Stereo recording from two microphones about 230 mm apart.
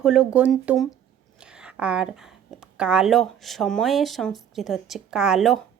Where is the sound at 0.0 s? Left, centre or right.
Centre.